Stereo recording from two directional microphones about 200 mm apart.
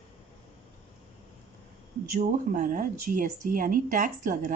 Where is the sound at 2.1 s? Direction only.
40° right (ahead or behind).